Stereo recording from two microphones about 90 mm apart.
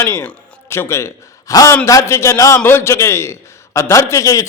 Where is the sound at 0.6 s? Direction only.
30° left (ahead or behind).